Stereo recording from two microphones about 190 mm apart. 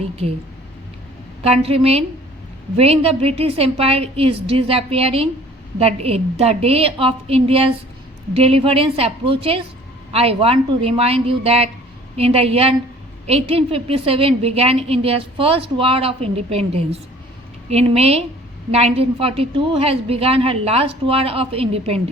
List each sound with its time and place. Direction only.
1.4 s a woman's voice: 30° right (ahead or behind)